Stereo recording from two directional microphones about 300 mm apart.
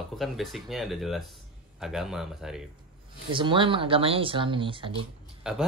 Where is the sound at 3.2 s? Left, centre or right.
Centre.